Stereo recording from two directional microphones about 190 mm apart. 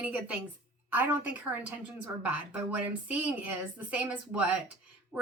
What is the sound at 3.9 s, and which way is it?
Speech, 10° right (ahead or behind).